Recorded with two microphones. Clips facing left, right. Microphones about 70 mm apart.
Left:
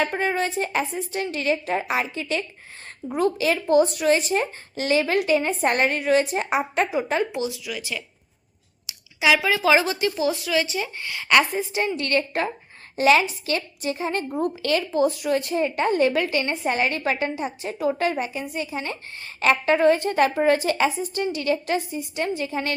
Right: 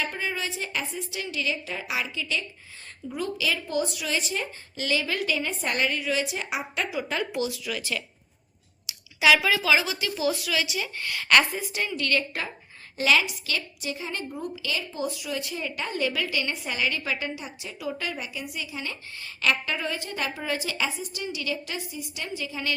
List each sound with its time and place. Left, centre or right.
0.0 s a woman's voice: left; by 8.0 s centre
9.2 s speech: left
11.5 s a woman's voice: left